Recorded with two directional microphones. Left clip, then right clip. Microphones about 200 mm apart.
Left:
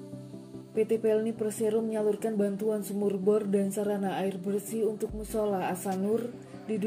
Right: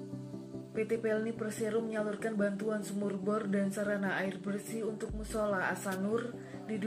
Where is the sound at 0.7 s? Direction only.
35° left (ahead or behind).